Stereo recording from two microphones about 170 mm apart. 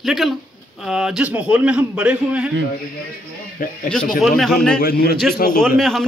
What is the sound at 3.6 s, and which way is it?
Speech, 55° left (ahead or behind).